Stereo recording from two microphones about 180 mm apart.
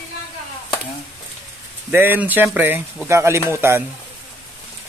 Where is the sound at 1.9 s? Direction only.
10° right (ahead or behind).